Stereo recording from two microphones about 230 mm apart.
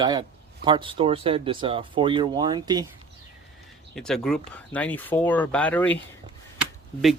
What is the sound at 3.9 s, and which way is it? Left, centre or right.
Speech, centre.